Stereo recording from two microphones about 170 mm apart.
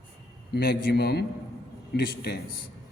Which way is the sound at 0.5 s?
70° left (ahead or behind).